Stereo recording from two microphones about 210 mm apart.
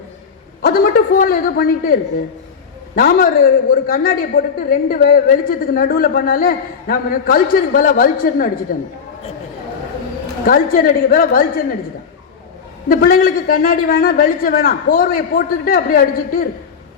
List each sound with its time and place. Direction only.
0.6 s a man's voice: 40° left (ahead or behind)
10.4 s a man's voice: 45° left (ahead or behind)
12.9 s a man's voice: 45° left (ahead or behind)